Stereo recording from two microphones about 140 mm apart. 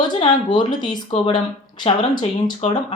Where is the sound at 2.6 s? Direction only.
45° left (ahead or behind).